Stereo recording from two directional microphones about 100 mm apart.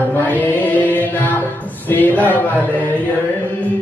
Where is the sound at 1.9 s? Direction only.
20° left (ahead or behind).